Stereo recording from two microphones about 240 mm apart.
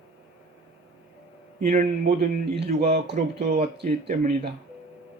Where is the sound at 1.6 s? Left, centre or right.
Right.